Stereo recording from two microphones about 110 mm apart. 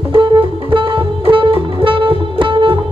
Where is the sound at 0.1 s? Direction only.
50° right (ahead or behind).